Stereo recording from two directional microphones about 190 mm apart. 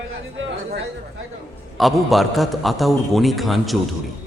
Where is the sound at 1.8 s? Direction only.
Centre (ahead or behind).